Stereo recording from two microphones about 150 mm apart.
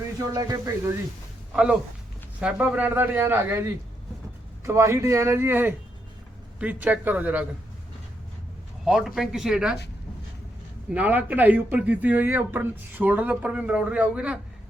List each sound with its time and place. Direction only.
0.3 s speech: 25° right (ahead or behind)
2.4 s speech: 10° right (ahead or behind)
8.8 s speech: 5° right (ahead or behind)
10.8 s speech: 10° right (ahead or behind)